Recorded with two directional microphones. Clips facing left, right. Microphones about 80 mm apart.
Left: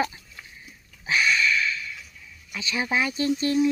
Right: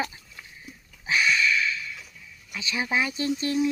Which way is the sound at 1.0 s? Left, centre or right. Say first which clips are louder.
Left 1 dB; centre.